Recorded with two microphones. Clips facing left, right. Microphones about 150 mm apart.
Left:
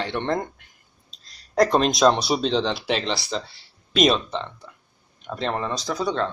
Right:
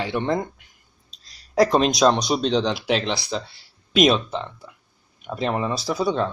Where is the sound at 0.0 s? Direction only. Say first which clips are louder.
Right 2 dB; 5° right (ahead or behind).